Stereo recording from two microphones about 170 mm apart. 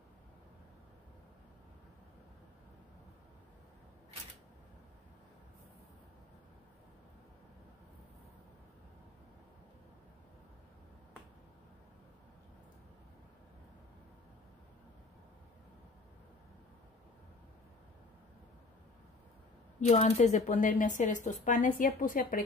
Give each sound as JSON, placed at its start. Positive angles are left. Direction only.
{"t": 19.8, "sound": "speech", "side_deg": 40}